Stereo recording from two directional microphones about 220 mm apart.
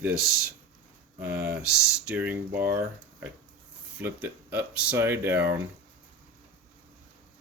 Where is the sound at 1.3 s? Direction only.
45° right (ahead or behind).